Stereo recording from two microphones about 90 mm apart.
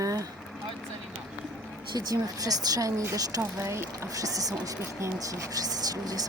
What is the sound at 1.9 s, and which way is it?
Speech, 45° right (ahead or behind).